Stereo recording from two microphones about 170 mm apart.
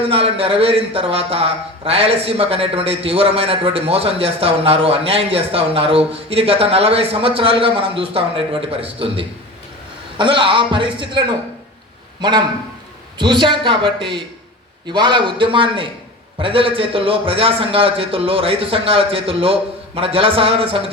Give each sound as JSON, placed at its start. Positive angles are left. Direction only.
{"t": 0.1, "sound": "a man's voice", "side_deg": -35}